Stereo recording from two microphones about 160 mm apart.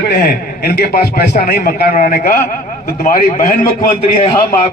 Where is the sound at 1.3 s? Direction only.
65° left (ahead or behind).